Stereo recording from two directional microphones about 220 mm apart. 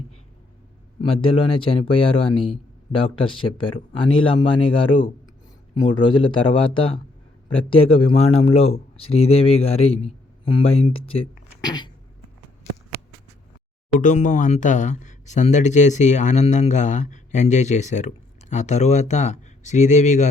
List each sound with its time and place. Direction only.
1.1 s speech: 25° left (ahead or behind)
14.0 s speech: 35° left (ahead or behind)